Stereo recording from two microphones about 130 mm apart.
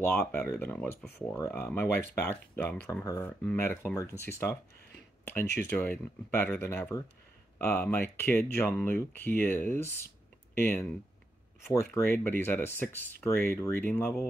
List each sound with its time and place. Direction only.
0.0 s speech: 15° left (ahead or behind)